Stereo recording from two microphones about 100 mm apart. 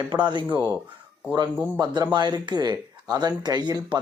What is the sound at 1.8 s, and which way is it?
Speech, 45° right (ahead or behind).